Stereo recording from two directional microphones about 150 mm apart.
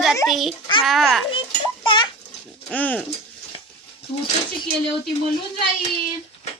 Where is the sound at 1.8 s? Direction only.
35° left (ahead or behind).